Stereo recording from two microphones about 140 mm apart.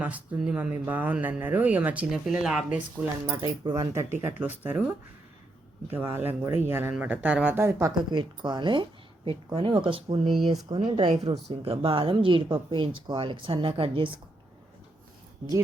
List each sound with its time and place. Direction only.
0.0 s speech: 10° right (ahead or behind)
3.2 s speech: 30° right (ahead or behind)
8.1 s speech: 35° right (ahead or behind)
10.5 s speech: 25° right (ahead or behind)
10.8 s speech: 40° right (ahead or behind)